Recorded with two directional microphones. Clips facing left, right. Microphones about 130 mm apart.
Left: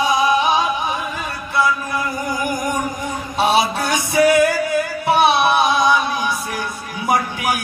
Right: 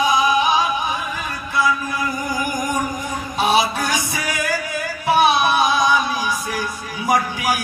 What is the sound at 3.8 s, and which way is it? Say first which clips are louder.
Speech: left 7 dB; 60° left (ahead or behind).